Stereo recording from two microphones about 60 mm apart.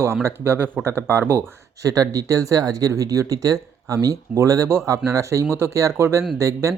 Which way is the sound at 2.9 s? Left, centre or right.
Right.